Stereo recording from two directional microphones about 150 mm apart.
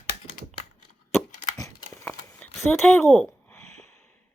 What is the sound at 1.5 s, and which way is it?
Crumpling, 20° left (ahead or behind).